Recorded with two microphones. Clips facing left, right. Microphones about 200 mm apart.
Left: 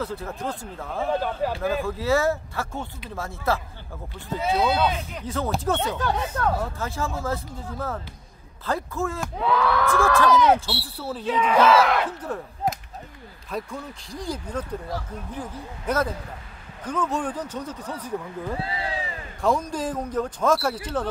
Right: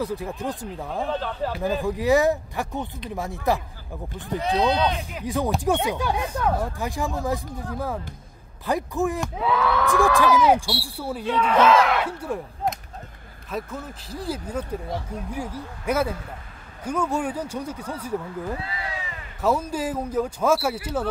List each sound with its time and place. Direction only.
0.0 s speech: 15° right (ahead or behind)
1.1 s speech: 10° left (ahead or behind)
1.6 s speech: 15° right (ahead or behind)
4.6 s speech: 5° left (ahead or behind)
4.9 s speech: 15° right (ahead or behind)
9.2 s speech: centre (ahead or behind)
9.8 s speech: 15° right (ahead or behind)
11.2 s speech: 5° left (ahead or behind)
12.0 s speech: 10° right (ahead or behind)
13.5 s speech: 5° right (ahead or behind)
18.6 s a sound: 30° left (ahead or behind)
19.4 s speech: 5° right (ahead or behind)